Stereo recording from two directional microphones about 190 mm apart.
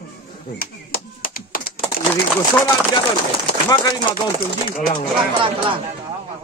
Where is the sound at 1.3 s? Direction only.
50° left (ahead or behind).